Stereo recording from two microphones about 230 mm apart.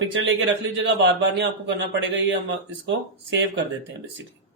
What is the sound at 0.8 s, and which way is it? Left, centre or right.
A man's voice, right.